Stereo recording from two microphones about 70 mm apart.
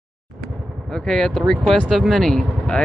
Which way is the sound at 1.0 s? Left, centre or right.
Centre.